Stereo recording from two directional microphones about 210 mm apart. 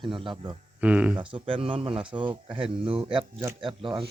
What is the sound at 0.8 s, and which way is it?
Speech, 5° right (ahead or behind).